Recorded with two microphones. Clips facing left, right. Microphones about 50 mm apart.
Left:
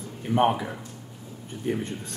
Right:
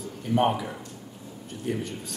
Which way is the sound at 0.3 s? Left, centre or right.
Left.